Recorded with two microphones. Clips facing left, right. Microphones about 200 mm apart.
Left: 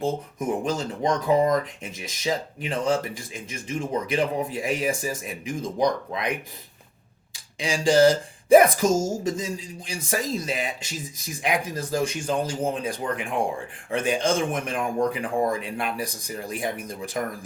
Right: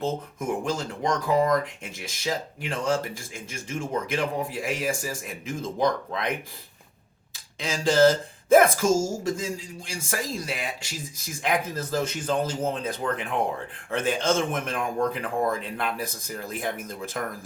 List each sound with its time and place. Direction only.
0.0 s speech: 20° left (ahead or behind)
7.3 s speech: 15° left (ahead or behind)